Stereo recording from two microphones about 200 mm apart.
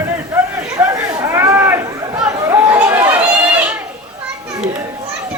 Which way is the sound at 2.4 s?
15° right (ahead or behind).